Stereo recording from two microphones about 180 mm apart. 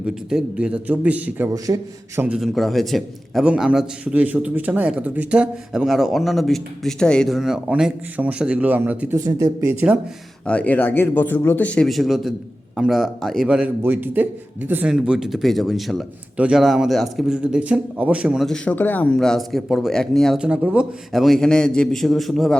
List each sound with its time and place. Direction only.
0.0 s a man's voice: 5° right (ahead or behind)
1.5 s a man's voice: 20° right (ahead or behind)
2.2 s a man's voice: 5° right (ahead or behind)
10.4 s a man's voice: 5° left (ahead or behind)